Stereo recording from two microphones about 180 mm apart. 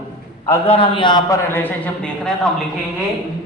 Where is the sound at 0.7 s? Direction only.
30° left (ahead or behind).